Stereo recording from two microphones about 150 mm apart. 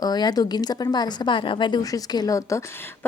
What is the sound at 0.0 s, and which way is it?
A woman's voice, 25° left (ahead or behind).